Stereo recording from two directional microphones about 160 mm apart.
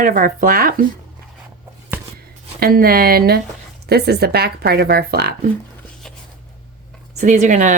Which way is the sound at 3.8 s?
85° right.